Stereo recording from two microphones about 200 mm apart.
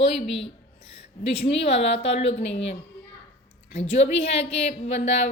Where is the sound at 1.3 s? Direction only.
30° left (ahead or behind).